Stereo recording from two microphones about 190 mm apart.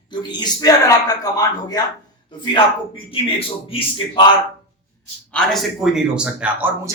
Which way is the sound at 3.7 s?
25° left (ahead or behind).